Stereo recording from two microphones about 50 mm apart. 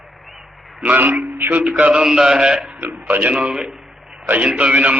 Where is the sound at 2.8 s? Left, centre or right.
Right.